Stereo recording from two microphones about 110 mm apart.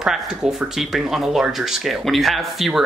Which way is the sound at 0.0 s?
5° right (ahead or behind).